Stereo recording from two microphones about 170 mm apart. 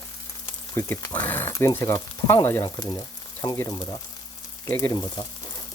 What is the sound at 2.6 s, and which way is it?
Speech, 25° left (ahead or behind).